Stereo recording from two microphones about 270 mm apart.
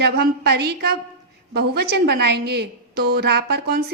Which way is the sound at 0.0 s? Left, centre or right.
Right.